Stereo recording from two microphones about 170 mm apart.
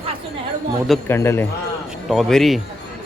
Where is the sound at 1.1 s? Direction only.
15° left (ahead or behind).